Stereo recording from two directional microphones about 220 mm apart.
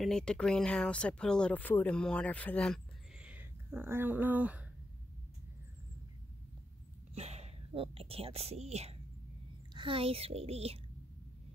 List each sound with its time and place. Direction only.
0.0 s speech: 5° left (ahead or behind)
7.2 s a woman's voice: 30° right (ahead or behind)